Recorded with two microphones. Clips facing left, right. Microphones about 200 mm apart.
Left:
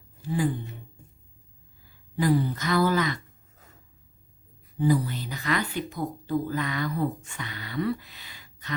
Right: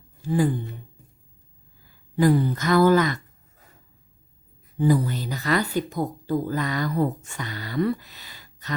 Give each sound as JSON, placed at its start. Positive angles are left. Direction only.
{"t": 0.2, "sound": "speech", "side_deg": -45}
{"t": 2.1, "sound": "speech", "side_deg": -50}
{"t": 4.8, "sound": "speech", "side_deg": -50}